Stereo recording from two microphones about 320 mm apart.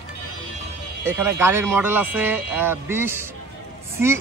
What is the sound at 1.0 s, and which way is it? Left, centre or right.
Speech, centre.